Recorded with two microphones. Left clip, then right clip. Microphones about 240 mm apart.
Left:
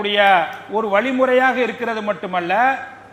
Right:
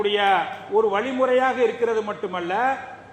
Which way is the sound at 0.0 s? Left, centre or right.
Left.